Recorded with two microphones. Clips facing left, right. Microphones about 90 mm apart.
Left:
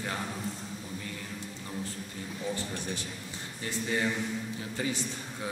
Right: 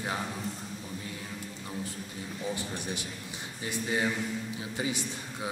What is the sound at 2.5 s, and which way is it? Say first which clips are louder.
A man's voice: even; 15° right (ahead or behind).